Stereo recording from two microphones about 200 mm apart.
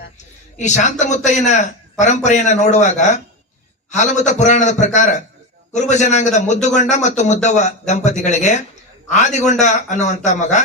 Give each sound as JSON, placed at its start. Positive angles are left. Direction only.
{"t": 0.6, "sound": "a man's voice", "side_deg": 35}